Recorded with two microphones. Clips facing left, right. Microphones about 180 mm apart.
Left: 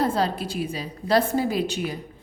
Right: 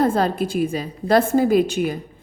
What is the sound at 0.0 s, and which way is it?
A woman's voice, 50° right (ahead or behind).